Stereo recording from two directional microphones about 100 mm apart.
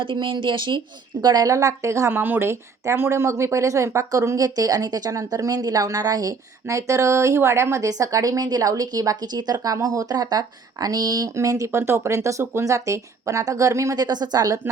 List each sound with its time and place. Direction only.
0.0 s speech: 55° right (ahead or behind)
1.2 s a woman's voice: 40° right (ahead or behind)